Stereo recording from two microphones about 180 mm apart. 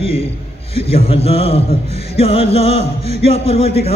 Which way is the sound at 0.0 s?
30° left (ahead or behind).